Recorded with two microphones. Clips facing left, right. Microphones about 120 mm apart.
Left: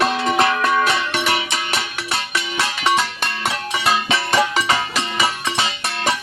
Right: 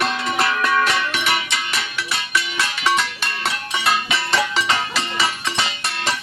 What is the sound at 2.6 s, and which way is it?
Music, 20° left (ahead or behind).